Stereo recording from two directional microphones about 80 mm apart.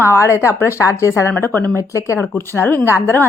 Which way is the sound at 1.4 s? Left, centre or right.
Left.